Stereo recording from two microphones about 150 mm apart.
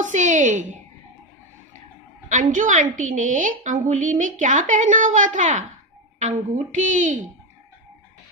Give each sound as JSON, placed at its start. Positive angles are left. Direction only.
{"t": 0.0, "sound": "a woman's voice", "side_deg": -55}
{"t": 2.2, "sound": "a woman's voice", "side_deg": -55}